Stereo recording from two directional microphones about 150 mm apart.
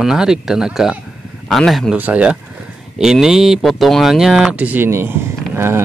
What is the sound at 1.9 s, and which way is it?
Speech, 10° right (ahead or behind).